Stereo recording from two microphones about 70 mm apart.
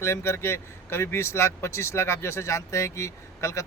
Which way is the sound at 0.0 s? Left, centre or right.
Left.